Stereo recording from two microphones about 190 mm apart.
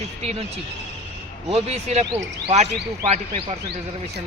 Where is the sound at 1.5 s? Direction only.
35° right (ahead or behind).